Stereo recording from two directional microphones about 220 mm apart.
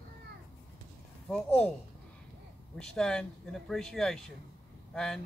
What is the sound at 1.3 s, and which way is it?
Speech, 5° left (ahead or behind).